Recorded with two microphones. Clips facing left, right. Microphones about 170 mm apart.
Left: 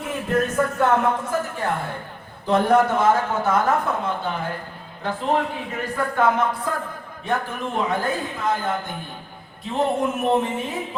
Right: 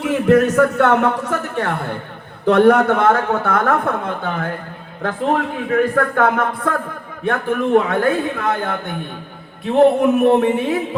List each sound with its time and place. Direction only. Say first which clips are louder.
0.0 s a man's voice: right 9 dB; 75° right (ahead or behind)